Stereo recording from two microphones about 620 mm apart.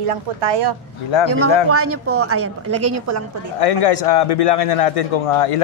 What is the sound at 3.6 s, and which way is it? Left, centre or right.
A man's voice, left.